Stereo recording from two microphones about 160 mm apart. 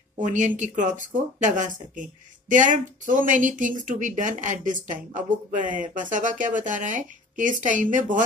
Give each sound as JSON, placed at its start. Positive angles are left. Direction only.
{"t": 0.2, "sound": "speech", "side_deg": -50}